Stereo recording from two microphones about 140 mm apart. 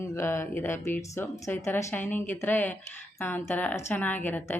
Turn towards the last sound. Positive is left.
turn(degrees=15)  # may be behind; listen again after turning